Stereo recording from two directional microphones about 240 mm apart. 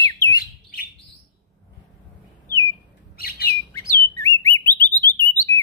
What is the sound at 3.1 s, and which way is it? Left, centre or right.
Bird, left.